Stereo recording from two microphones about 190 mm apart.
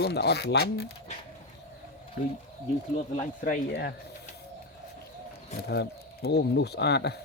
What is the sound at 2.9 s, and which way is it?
Speech, 40° left (ahead or behind).